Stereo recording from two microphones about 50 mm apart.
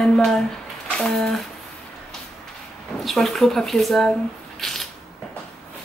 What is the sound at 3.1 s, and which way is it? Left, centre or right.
Speech, centre.